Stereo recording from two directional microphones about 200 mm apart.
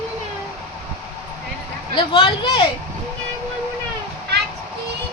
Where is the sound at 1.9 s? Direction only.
25° left (ahead or behind).